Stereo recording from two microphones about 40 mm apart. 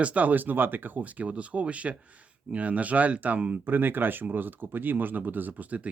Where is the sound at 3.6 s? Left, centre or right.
Right.